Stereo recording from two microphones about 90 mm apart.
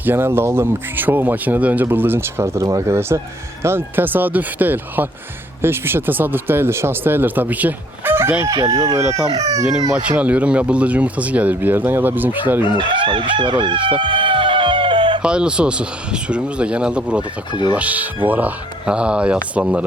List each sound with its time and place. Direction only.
0.0 s speech: 25° right (ahead or behind)
8.4 s crowing: 45° right (ahead or behind)
9.0 s speech: 30° right (ahead or behind)
9.3 s crowing: 40° right (ahead or behind)
9.9 s speech: 15° right (ahead or behind)
12.7 s chicken: 65° right (ahead or behind)
15.2 s speech: 10° right (ahead or behind)